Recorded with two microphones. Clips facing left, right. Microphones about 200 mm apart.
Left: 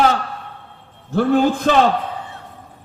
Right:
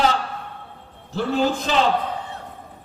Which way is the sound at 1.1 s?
55° left (ahead or behind).